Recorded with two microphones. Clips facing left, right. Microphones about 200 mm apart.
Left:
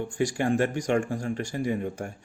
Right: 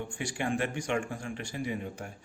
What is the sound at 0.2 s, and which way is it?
Speech, 40° left (ahead or behind).